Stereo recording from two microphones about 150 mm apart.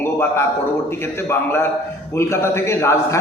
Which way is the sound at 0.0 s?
15° left (ahead or behind).